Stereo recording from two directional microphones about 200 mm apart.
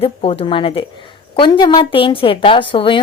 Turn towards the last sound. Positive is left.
turn(degrees=25)  # may be behind; listen again after turning